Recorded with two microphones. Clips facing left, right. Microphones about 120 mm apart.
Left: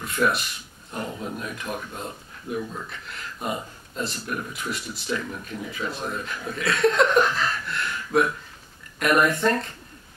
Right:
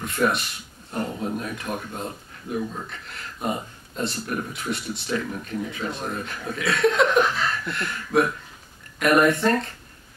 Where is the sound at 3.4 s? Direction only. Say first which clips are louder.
Right 2 dB; centre (ahead or behind).